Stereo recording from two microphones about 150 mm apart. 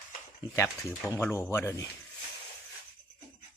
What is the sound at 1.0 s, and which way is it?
Speech, 15° left (ahead or behind).